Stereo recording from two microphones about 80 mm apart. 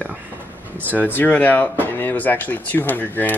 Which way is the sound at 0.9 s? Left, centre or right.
Left.